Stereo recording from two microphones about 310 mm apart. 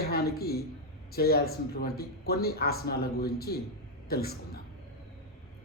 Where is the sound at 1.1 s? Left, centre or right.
Left.